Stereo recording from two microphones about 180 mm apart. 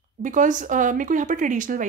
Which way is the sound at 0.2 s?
45° right (ahead or behind).